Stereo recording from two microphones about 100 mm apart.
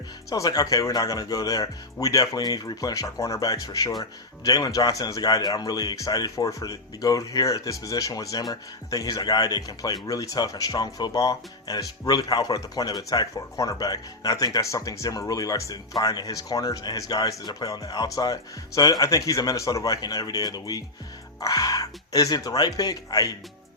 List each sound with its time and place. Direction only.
0.3 s a man's voice: 35° left (ahead or behind)
16.0 s a man's voice: 40° left (ahead or behind)